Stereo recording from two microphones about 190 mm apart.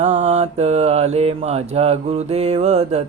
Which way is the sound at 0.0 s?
35° right (ahead or behind).